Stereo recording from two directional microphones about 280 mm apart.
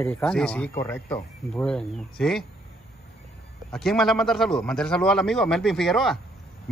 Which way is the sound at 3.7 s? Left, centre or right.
Centre.